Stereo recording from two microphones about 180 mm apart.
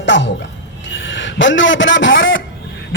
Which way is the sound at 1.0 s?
90° left.